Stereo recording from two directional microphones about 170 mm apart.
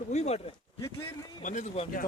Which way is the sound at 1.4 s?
45° left (ahead or behind).